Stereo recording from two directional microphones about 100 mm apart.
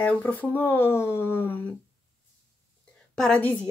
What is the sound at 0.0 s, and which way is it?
Speech, 15° left (ahead or behind).